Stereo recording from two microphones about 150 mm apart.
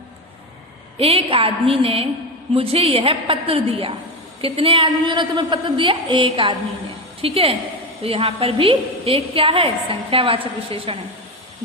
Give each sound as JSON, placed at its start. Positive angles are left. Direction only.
{"t": 0.9, "sound": "a woman's voice", "side_deg": -40}